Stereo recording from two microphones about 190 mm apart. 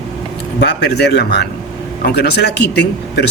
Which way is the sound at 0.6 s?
60° left (ahead or behind).